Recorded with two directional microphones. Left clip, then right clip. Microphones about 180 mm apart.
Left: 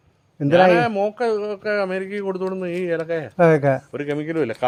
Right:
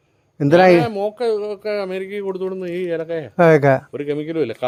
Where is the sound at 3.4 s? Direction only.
55° right (ahead or behind).